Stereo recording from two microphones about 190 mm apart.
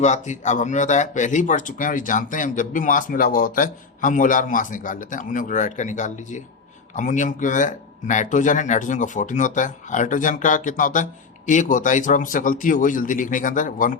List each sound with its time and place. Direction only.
0.0 s speech: 40° left (ahead or behind)